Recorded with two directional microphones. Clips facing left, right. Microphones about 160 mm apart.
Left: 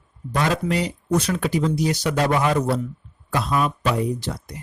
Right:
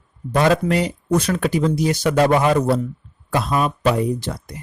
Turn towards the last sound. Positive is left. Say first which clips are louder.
# right 3 dB
turn(degrees=-50)  # may be behind; listen again after turning